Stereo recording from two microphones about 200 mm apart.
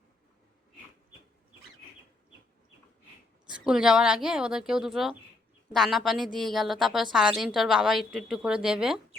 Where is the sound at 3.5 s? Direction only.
5° right (ahead or behind).